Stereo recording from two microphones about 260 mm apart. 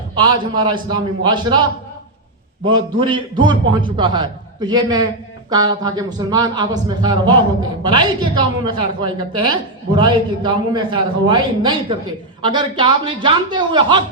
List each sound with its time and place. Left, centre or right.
0.2 s a woman's voice: centre
2.6 s a woman's voice: centre